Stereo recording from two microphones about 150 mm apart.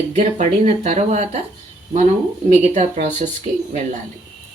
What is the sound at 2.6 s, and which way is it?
Dishes, 50° right (ahead or behind).